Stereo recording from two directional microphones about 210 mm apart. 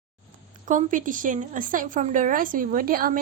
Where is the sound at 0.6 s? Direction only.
40° right (ahead or behind).